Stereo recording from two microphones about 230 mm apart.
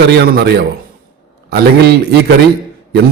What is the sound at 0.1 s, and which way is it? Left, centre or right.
Speech, right.